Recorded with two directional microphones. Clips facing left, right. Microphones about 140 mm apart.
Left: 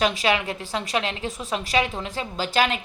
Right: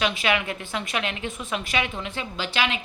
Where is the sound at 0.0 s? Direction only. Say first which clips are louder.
Left 2 dB; 40° left (ahead or behind).